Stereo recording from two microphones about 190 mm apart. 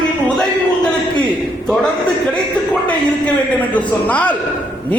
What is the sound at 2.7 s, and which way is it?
A man's voice, 5° left (ahead or behind).